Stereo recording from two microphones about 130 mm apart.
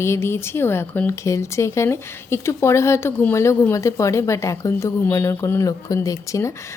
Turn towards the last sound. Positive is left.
turn(degrees=25)  # may be behind; listen again after turning